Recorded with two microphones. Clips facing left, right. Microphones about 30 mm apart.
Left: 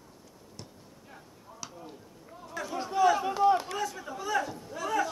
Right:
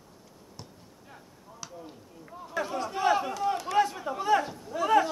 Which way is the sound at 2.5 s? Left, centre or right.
Right.